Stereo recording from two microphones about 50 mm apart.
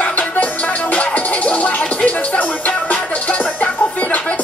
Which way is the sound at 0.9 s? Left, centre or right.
Left.